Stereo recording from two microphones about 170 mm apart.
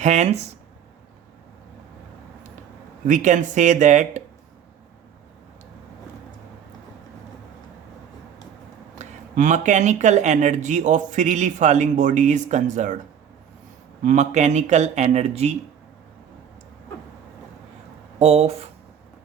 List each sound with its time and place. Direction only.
0.0 s speech: 40° right (ahead or behind)
3.1 s speech: 45° right (ahead or behind)
9.0 s speech: 45° right (ahead or behind)
14.0 s speech: 45° right (ahead or behind)
18.2 s speech: 35° right (ahead or behind)